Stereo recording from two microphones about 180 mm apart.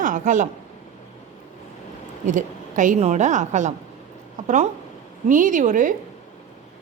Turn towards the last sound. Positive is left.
turn(degrees=-45)  # may be behind; listen again after turning